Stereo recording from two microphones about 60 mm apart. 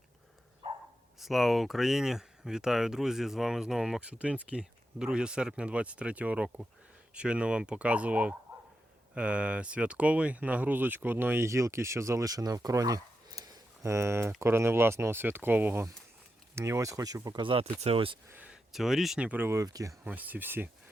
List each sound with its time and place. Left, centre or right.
1.2 s speech: centre; by 11.4 s right
11.4 s speech: right
13.8 s speech: right
16.6 s speech: right
18.5 s speech: centre
19.5 s speech: right
20.1 s speech: right